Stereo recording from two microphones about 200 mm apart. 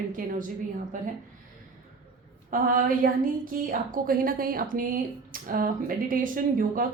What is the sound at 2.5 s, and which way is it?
Speech, 45° right (ahead or behind).